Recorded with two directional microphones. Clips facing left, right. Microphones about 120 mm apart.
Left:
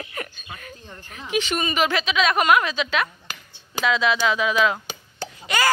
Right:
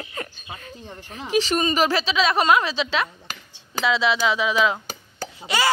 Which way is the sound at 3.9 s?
25° right (ahead or behind).